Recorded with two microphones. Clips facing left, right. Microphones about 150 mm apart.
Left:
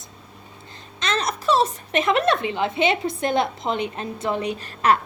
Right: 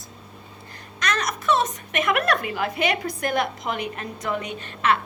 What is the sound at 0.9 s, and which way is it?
A woman's voice, 30° left (ahead or behind).